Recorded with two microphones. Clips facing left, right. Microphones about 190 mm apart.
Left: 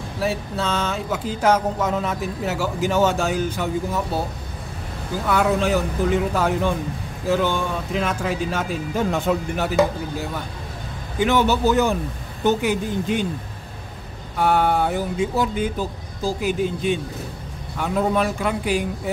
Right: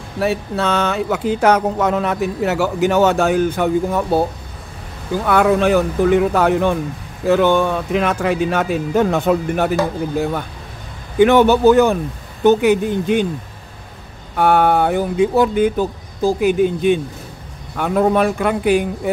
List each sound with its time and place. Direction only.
0.2 s speech: 65° right (ahead or behind)
5.2 s speech: 60° right (ahead or behind)
11.1 s speech: 60° right (ahead or behind)
14.3 s speech: 60° right (ahead or behind)